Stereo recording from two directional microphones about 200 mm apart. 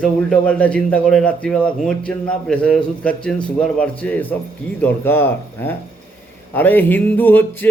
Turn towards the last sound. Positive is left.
turn(degrees=10)  # may be behind; listen again after turning